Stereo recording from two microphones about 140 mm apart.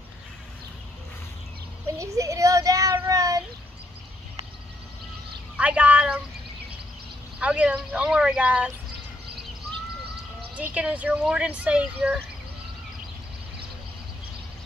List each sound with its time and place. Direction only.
2.0 s child singing: 25° right (ahead or behind)
5.6 s speech: 10° right (ahead or behind)
7.3 s speech: 10° right (ahead or behind)
10.6 s speech: 10° right (ahead or behind)